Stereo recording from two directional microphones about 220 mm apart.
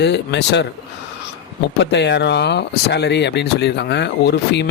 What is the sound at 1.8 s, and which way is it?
Speech, 50° left (ahead or behind).